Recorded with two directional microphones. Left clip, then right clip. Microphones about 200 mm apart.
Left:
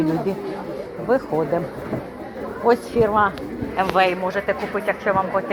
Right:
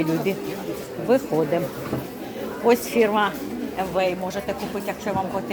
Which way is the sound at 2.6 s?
10° right (ahead or behind).